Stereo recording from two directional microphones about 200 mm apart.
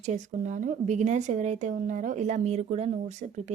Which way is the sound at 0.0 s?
40° right (ahead or behind).